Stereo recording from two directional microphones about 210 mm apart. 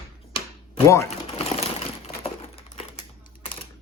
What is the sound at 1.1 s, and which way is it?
Sewing machine, 30° left (ahead or behind).